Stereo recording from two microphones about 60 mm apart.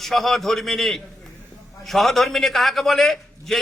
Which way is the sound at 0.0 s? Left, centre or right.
Centre.